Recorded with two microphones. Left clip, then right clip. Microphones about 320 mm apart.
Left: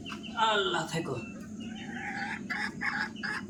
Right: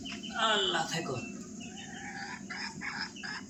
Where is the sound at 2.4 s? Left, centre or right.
Left.